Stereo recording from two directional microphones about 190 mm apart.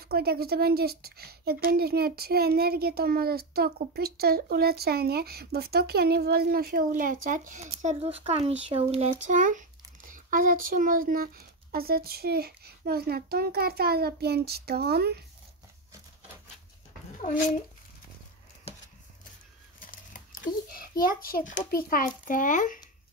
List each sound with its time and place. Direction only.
0.0 s speech: 55° right (ahead or behind)
17.2 s a child's voice: 45° left (ahead or behind)
19.8 s a sound: 45° left (ahead or behind)
21.0 s a child's voice: 50° left (ahead or behind)